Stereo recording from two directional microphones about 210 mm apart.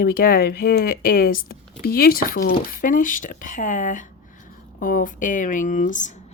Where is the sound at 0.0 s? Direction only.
45° left (ahead or behind).